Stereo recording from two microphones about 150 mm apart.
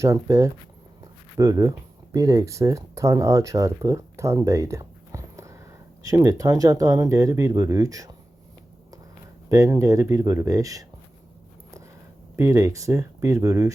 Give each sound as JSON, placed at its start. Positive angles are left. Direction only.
{"t": 0.0, "sound": "speech", "side_deg": -20}
{"t": 9.5, "sound": "speech", "side_deg": -20}
{"t": 12.4, "sound": "speech", "side_deg": -20}